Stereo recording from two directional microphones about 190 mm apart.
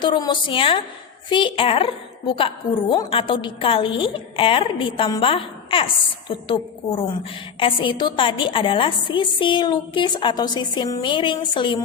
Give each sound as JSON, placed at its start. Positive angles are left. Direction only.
{"t": 0.0, "sound": "a woman's voice", "side_deg": 25}